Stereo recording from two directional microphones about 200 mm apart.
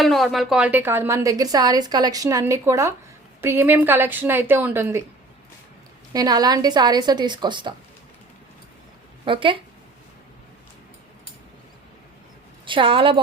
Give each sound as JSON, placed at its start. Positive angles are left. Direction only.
{"t": 0.0, "sound": "a woman's voice", "side_deg": 0}
{"t": 6.1, "sound": "a woman's voice", "side_deg": -20}
{"t": 9.2, "sound": "a woman's voice", "side_deg": -25}
{"t": 12.6, "sound": "a woman's voice", "side_deg": -25}